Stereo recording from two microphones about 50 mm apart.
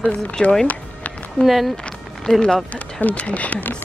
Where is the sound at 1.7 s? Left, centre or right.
Centre.